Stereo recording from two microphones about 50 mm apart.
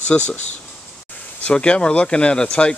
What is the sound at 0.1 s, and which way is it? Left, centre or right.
Speech, centre.